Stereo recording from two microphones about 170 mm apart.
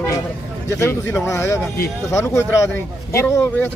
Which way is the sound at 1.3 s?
15° left (ahead or behind).